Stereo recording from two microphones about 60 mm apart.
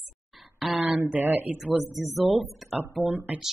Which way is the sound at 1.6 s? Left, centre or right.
Centre.